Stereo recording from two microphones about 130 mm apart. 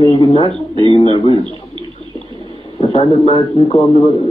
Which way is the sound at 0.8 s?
45° left (ahead or behind).